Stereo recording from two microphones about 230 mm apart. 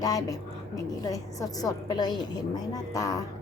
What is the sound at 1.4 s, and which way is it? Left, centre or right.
A woman's voice, centre.